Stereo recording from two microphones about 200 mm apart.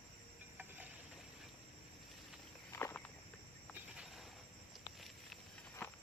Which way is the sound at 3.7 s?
5° right (ahead or behind).